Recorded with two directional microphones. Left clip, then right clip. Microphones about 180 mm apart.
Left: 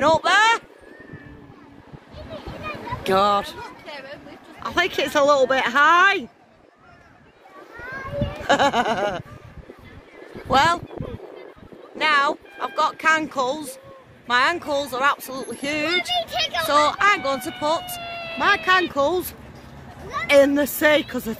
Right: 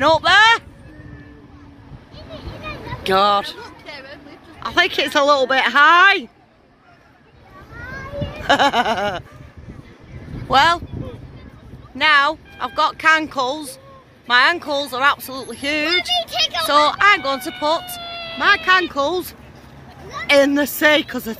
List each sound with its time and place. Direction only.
0.0 s a sound: 5° left (ahead or behind)
3.1 s speech: 5° left (ahead or behind)
3.6 s a sound: 75° left (ahead or behind)
4.6 s speech: centre (ahead or behind)
8.4 s speech: centre (ahead or behind)
10.5 s speech: centre (ahead or behind)
12.0 s speech: centre (ahead or behind)
16.2 s speech: 15° left (ahead or behind)
16.6 s speech: 5° left (ahead or behind)
20.2 s speech: centre (ahead or behind)